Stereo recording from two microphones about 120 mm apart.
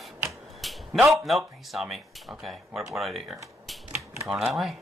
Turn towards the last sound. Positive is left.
turn(degrees=0)  # may be behind; listen again after turning